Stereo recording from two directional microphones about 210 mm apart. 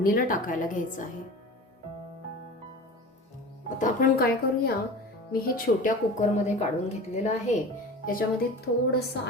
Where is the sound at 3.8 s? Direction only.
40° left (ahead or behind).